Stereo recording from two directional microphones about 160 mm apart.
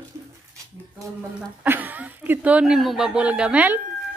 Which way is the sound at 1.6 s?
10° right (ahead or behind).